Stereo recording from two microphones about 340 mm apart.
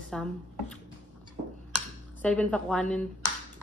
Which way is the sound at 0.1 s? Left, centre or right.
Centre.